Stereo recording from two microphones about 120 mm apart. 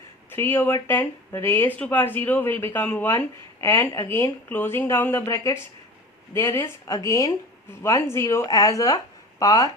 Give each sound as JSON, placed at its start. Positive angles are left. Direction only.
{"t": 0.3, "sound": "speech", "side_deg": 20}